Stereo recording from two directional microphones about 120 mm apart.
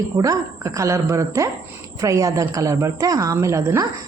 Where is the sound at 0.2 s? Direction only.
25° right (ahead or behind).